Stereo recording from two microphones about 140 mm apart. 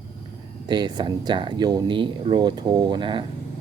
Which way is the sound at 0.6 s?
30° right (ahead or behind).